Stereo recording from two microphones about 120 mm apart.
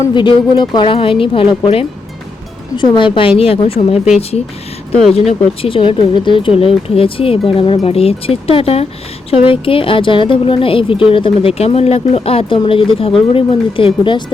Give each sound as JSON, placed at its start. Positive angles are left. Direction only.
{"t": 0.1, "sound": "speech", "side_deg": 40}
{"t": 5.3, "sound": "speech", "side_deg": 50}